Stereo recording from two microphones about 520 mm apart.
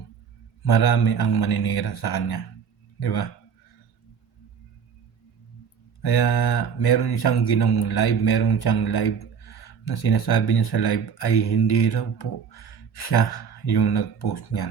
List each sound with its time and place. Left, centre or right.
0.6 s speech: left
6.0 s speech: left